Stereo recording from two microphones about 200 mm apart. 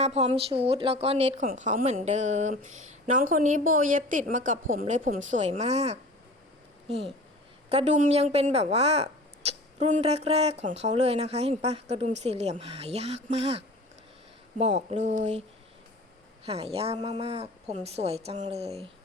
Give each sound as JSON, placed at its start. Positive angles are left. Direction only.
{"t": 0.0, "sound": "speech", "side_deg": -30}
{"t": 16.5, "sound": "speech", "side_deg": -30}